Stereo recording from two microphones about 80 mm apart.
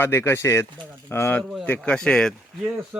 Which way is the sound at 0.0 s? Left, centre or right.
Left.